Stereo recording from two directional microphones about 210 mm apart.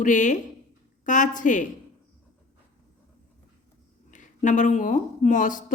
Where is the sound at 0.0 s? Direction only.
35° left (ahead or behind).